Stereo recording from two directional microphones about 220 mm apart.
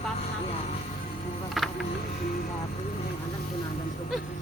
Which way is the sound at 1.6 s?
Centre (ahead or behind).